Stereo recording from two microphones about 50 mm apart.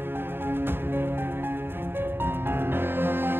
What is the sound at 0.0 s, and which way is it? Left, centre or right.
Music, right.